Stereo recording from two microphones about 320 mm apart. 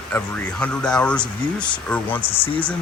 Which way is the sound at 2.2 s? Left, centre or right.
Centre.